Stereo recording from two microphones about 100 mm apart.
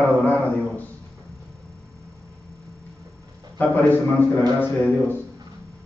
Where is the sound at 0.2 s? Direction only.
15° left (ahead or behind).